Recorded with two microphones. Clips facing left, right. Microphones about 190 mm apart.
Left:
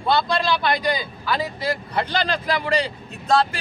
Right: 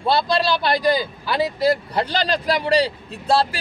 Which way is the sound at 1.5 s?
35° right (ahead or behind).